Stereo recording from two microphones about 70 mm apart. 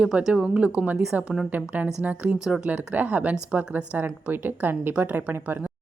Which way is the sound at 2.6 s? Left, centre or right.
Right.